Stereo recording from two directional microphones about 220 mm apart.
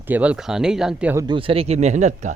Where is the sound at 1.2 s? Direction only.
20° right (ahead or behind).